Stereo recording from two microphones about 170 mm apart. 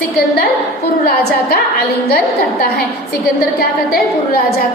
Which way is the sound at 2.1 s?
65° left (ahead or behind).